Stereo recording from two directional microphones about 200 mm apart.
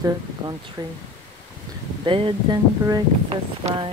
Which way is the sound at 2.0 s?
25° right (ahead or behind).